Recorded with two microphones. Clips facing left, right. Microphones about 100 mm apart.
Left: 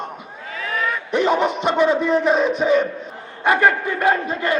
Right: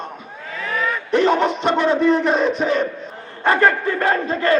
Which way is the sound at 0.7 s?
10° left (ahead or behind).